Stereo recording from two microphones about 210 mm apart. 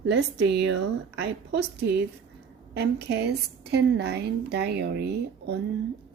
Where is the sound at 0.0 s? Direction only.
55° right (ahead or behind).